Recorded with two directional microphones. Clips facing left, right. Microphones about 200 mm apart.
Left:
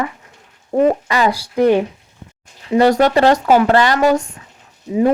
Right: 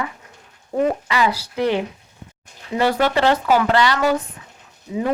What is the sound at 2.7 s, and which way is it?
Speech, 40° left (ahead or behind).